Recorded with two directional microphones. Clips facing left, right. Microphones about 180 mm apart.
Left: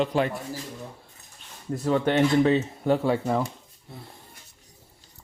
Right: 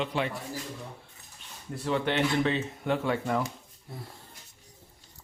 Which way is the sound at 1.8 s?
40° left (ahead or behind).